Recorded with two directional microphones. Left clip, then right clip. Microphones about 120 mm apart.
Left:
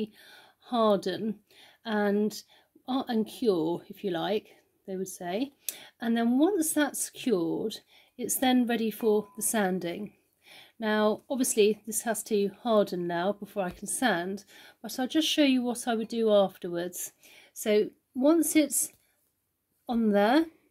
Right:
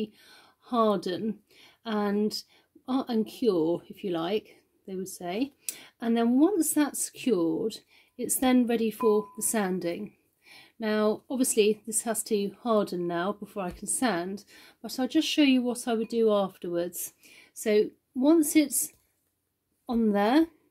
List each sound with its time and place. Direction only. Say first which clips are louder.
0.0 s speech: right 1 dB; 30° left (ahead or behind); by 20.4 s 45° left (ahead or behind)